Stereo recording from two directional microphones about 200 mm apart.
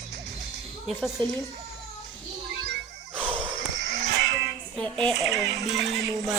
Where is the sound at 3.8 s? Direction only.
55° right (ahead or behind).